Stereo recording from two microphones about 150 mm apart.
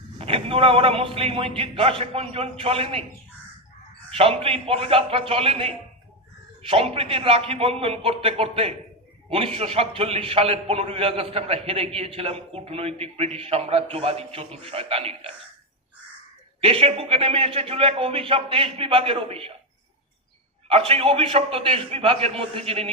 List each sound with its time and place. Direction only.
0.2 s a man's voice: 40° right (ahead or behind)
4.2 s a man's voice: 40° right (ahead or behind)
16.6 s a man's voice: 40° right (ahead or behind)
20.7 s a man's voice: 40° right (ahead or behind)